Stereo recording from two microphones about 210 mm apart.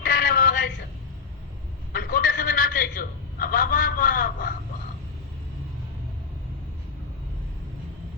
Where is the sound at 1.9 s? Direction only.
45° left (ahead or behind).